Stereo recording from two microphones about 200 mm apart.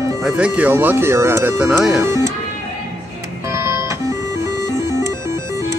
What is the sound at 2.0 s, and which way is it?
Speech, 15° right (ahead or behind).